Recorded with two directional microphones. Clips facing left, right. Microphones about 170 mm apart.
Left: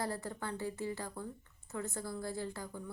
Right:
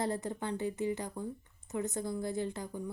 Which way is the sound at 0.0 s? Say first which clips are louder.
Right 4 dB; 20° right (ahead or behind).